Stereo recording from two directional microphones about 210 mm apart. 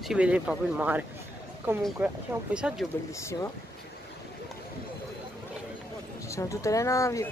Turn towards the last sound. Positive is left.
turn(degrees=15)  # may be behind; listen again after turning